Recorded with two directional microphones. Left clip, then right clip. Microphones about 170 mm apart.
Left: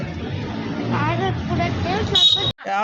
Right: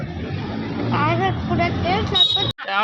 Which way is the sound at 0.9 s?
90° right.